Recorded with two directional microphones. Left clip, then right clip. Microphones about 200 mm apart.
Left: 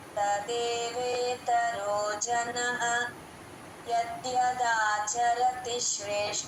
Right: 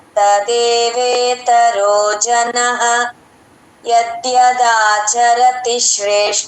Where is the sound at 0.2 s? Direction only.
50° right (ahead or behind).